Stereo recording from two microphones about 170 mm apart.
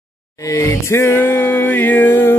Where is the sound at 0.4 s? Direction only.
20° left (ahead or behind).